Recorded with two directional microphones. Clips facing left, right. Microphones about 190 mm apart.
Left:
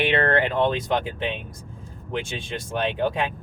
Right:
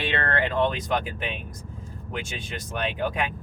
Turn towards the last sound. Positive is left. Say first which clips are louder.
# left 3 dB
turn(degrees=25)  # may be behind; listen again after turning